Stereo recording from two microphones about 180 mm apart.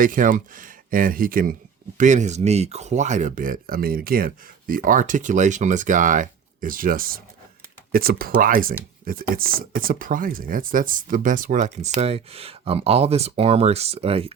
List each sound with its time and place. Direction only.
0.0 s speech: 50° right (ahead or behind); by 14.3 s 30° right (ahead or behind)